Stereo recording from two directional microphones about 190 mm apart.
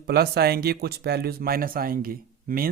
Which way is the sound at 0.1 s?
55° right (ahead or behind).